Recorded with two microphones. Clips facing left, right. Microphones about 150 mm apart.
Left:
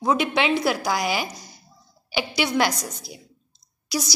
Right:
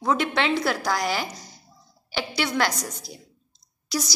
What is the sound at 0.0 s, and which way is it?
A woman's voice, 10° left (ahead or behind).